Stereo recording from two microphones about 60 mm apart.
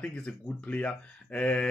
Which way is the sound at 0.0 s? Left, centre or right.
Centre.